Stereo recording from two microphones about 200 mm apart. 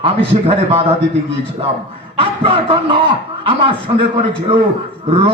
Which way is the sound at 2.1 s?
25° right (ahead or behind).